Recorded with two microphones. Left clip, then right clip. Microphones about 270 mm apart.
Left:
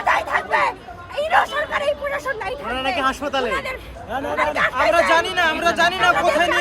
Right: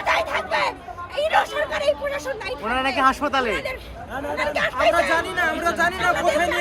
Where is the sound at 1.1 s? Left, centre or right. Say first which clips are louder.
Left 2 dB; centre.